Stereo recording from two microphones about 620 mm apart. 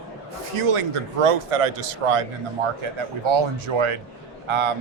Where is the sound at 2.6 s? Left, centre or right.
Right.